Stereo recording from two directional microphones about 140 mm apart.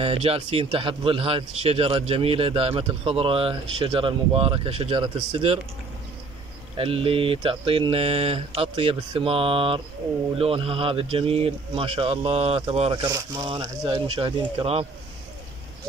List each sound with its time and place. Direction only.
0.0 s speech: 45° right (ahead or behind)
6.8 s speech: 40° right (ahead or behind)
13.0 s speech: 25° right (ahead or behind)